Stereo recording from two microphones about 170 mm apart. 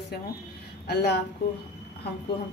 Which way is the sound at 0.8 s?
75° left (ahead or behind).